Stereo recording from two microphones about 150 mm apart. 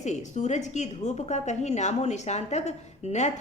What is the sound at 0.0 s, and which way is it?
A woman's voice, 50° left (ahead or behind).